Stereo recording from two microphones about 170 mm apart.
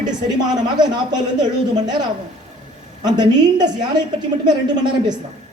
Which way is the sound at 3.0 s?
25° right (ahead or behind).